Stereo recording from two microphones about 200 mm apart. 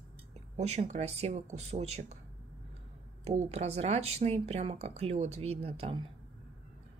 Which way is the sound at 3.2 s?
35° right (ahead or behind).